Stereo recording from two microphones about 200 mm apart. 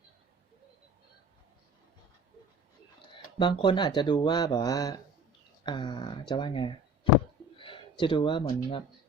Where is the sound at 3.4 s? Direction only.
25° left (ahead or behind).